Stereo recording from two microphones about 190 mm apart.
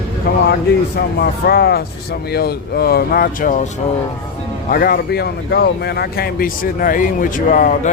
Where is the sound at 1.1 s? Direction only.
55° left (ahead or behind).